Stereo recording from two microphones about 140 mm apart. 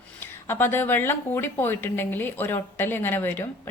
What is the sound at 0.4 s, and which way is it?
A woman's voice, 15° left (ahead or behind).